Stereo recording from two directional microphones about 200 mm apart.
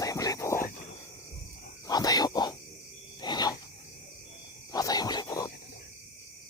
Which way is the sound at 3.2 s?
20° left (ahead or behind).